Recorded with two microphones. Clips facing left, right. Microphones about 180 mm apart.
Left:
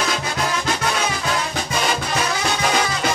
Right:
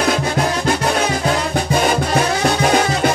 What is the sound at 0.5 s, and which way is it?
Music, 40° right (ahead or behind).